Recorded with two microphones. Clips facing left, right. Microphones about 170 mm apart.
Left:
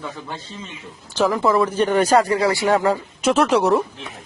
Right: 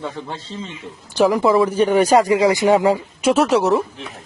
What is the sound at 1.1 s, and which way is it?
Speech, 15° right (ahead or behind).